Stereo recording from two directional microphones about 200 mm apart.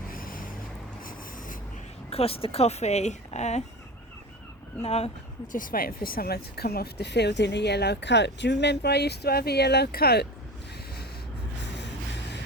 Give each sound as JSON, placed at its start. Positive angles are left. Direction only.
{"t": 0.1, "sound": "vehicle", "side_deg": 45}
{"t": 2.0, "sound": "speech", "side_deg": 30}
{"t": 4.8, "sound": "speech", "side_deg": 30}